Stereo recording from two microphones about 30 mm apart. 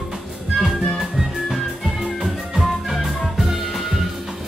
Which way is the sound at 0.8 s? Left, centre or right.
Centre.